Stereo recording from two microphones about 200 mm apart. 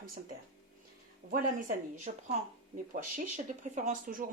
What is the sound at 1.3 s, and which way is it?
Speech, 40° right (ahead or behind).